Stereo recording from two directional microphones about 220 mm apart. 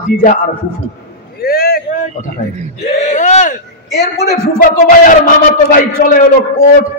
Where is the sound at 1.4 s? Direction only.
45° left (ahead or behind).